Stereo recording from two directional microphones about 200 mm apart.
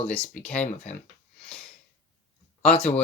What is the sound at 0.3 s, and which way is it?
Speech, 5° left (ahead or behind).